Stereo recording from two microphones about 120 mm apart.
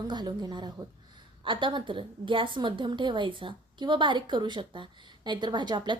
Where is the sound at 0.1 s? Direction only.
35° right (ahead or behind).